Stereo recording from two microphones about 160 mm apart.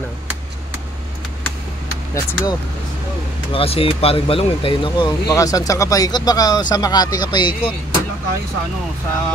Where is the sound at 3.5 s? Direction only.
35° left (ahead or behind).